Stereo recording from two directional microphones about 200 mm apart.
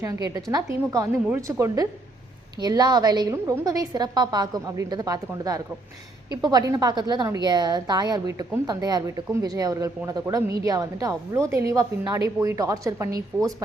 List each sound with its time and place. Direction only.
0.0 s a woman's voice: 15° right (ahead or behind)